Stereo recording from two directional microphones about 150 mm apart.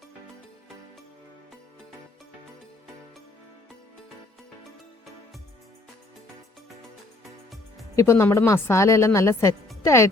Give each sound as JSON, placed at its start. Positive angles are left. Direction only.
{"t": 7.9, "sound": "speech", "side_deg": 20}